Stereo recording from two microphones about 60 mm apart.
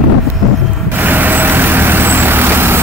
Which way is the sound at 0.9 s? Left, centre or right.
Right.